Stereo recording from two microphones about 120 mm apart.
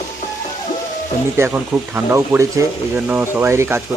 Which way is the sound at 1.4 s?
20° right (ahead or behind).